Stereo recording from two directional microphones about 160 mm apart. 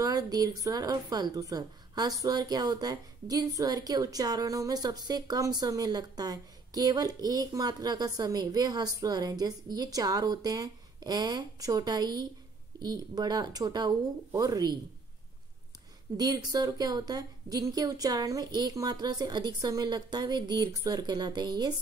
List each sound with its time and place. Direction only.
0.0 s a woman's voice: 25° right (ahead or behind)
16.2 s a woman's voice: 25° right (ahead or behind)